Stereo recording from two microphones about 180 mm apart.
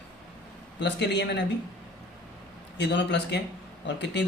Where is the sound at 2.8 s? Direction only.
70° left (ahead or behind).